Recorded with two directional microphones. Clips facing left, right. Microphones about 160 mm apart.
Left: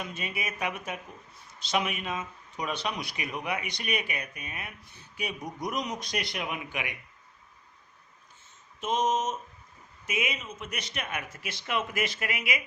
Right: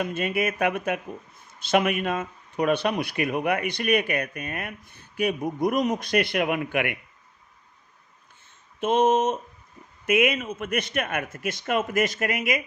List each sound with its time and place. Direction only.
0.0 s speech: 55° right (ahead or behind)
8.8 s speech: 60° right (ahead or behind)